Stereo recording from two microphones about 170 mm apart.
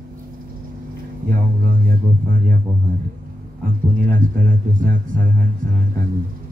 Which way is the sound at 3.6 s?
50° right (ahead or behind).